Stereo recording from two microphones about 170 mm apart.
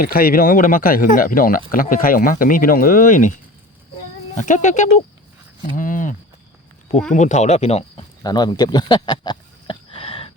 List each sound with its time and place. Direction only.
0.0 s speech: 60° left (ahead or behind)
4.4 s speech: 45° left (ahead or behind)
8.2 s a sound: 25° left (ahead or behind)